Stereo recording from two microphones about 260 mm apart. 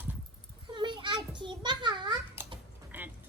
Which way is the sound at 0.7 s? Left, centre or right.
Centre.